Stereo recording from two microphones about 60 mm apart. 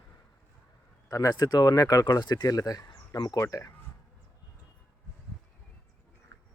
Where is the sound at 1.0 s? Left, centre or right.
Left.